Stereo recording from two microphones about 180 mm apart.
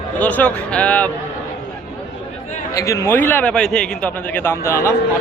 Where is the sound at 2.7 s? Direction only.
15° left (ahead or behind).